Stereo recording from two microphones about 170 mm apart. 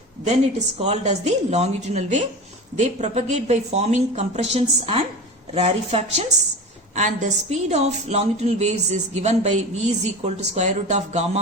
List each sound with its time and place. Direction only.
0.8 s a woman's voice: 40° right (ahead or behind)